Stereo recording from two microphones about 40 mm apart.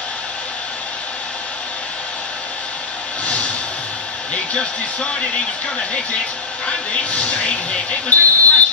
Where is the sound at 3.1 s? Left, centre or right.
Left.